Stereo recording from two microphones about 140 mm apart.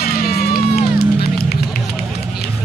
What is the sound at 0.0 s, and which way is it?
Run, 90° left.